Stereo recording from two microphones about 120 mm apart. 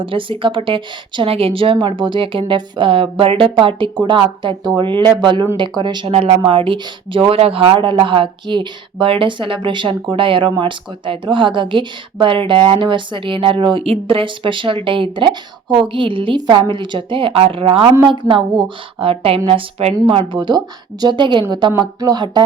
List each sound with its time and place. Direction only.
0.0 s speech: 45° right (ahead or behind)